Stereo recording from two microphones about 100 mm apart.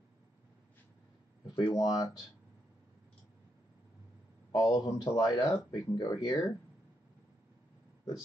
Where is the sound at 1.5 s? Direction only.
40° left (ahead or behind).